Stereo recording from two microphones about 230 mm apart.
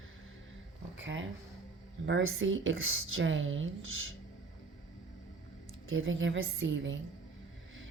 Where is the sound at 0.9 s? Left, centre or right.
Right.